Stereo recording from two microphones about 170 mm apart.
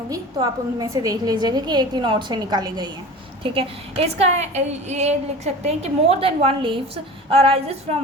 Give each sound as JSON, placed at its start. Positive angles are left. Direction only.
{"t": 0.4, "sound": "a woman's voice", "side_deg": -25}